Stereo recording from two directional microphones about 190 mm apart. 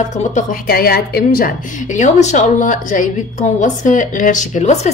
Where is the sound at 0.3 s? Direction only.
45° left (ahead or behind).